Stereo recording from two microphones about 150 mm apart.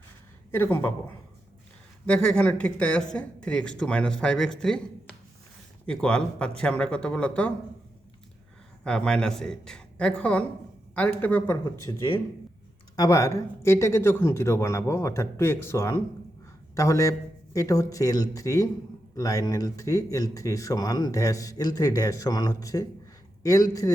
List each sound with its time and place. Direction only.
0.5 s speech: 15° left (ahead or behind)
2.0 s speech: 5° left (ahead or behind)
5.8 s speech: 5° left (ahead or behind)
8.8 s speech: 5° left (ahead or behind)
11.9 s speech: 25° left (ahead or behind)